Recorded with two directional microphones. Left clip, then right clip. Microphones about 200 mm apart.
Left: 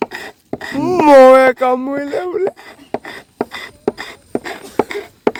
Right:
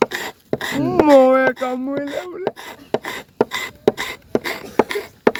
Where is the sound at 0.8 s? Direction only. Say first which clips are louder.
Left 6 dB; 65° left (ahead or behind).